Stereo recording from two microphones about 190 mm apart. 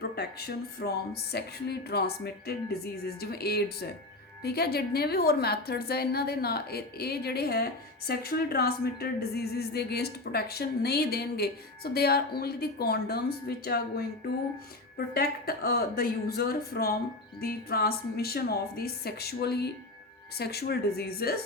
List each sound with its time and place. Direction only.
0.2 s a woman's voice: 55° left (ahead or behind)